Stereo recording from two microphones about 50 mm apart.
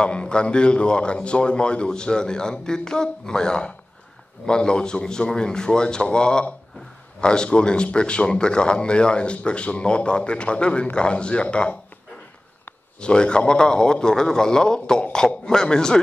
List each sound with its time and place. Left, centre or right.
0.0 s a man's voice: left
13.0 s a man's voice: centre